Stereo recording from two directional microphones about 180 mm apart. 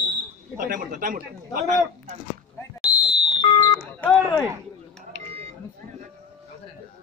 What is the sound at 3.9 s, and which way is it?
Telephone dialing, 5° left (ahead or behind).